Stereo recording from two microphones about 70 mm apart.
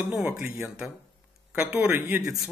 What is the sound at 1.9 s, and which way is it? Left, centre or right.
Speech, right.